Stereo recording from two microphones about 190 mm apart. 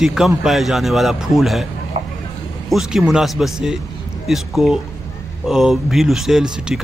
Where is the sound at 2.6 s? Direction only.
Centre (ahead or behind).